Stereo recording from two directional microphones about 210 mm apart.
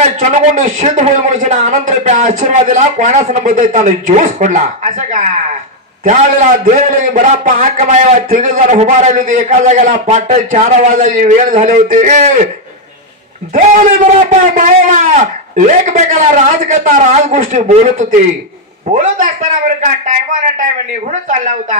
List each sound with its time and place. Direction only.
0.0 s a man's voice: 35° right (ahead or behind)
14.3 s a man's voice: 35° right (ahead or behind)